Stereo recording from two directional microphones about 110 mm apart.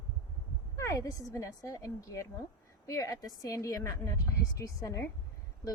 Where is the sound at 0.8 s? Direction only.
25° left (ahead or behind).